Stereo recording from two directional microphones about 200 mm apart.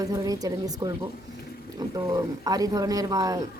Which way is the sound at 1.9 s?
20° right (ahead or behind).